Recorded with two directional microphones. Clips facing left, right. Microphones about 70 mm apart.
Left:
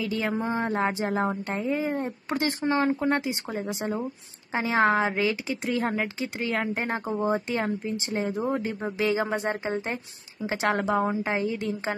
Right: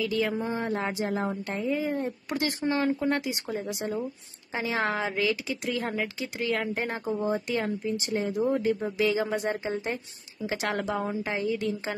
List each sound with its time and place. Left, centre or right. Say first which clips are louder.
0.5 s speech: left 3 dB; left